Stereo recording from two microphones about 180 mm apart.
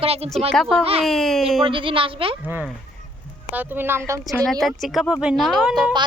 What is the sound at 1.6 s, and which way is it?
Speech, 30° right (ahead or behind).